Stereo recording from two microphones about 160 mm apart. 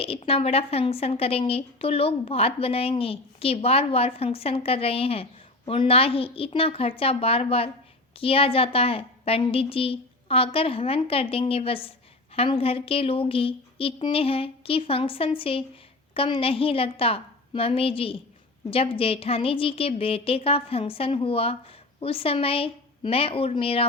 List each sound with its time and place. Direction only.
0.0 s a woman's voice: 35° left (ahead or behind)